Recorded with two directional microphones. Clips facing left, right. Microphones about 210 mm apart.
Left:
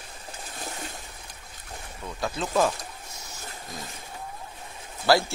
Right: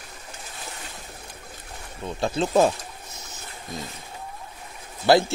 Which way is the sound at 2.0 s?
25° right (ahead or behind).